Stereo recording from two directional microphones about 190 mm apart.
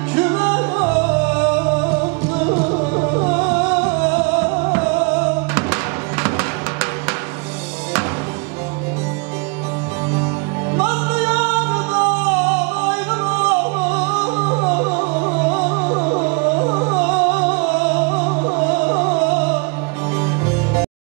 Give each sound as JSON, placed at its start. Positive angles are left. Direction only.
{"t": 0.1, "sound": "music", "side_deg": -10}
{"t": 10.8, "sound": "music", "side_deg": -10}
{"t": 15.1, "sound": "music", "side_deg": -35}
{"t": 17.0, "sound": "music", "side_deg": -10}
{"t": 18.3, "sound": "music", "side_deg": -30}
{"t": 18.6, "sound": "music", "side_deg": -10}